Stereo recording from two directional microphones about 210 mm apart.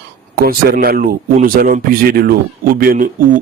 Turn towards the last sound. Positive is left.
turn(degrees=-40)  # may be behind; listen again after turning